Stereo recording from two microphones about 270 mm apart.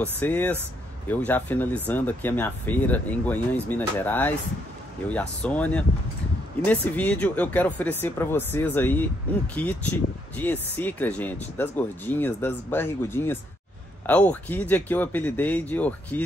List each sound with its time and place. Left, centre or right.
0.0 s speech: centre